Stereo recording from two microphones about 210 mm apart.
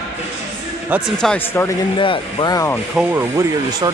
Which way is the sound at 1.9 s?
20° left (ahead or behind).